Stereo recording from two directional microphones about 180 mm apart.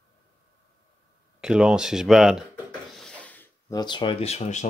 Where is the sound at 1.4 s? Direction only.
5° right (ahead or behind).